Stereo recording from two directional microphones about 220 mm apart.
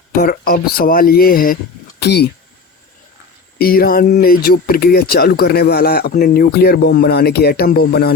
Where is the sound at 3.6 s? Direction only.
45° left (ahead or behind).